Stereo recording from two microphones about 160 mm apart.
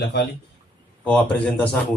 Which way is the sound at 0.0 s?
90° left.